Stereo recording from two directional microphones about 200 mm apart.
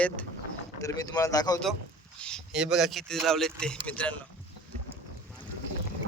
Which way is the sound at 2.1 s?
5° left (ahead or behind).